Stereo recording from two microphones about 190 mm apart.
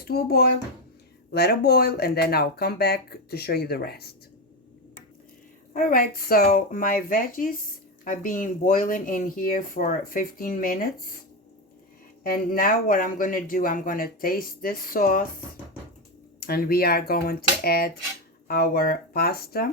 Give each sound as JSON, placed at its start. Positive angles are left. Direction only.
{"t": 0.0, "sound": "speech", "side_deg": 55}
{"t": 5.7, "sound": "speech", "side_deg": 45}
{"t": 12.2, "sound": "speech", "side_deg": 50}
{"t": 16.5, "sound": "speech", "side_deg": 50}